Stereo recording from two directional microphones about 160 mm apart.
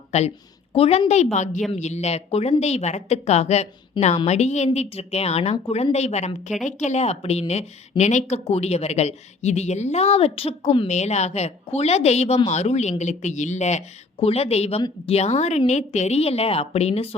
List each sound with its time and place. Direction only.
0.1 s a woman's voice: 40° left (ahead or behind)